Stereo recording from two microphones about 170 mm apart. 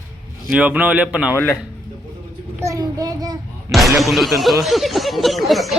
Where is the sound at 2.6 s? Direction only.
20° right (ahead or behind).